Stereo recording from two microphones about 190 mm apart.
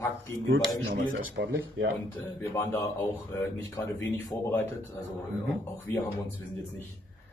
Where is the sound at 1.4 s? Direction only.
75° right (ahead or behind).